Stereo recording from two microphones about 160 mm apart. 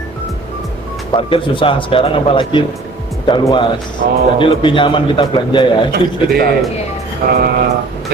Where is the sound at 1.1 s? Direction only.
30° left (ahead or behind).